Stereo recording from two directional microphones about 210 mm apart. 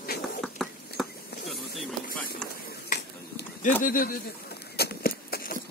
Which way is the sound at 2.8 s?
50° left (ahead or behind).